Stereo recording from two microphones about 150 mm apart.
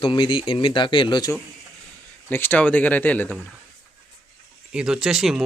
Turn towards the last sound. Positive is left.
turn(degrees=-5)  # may be behind; listen again after turning